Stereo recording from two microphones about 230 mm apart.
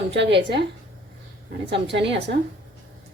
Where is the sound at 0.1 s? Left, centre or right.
Right.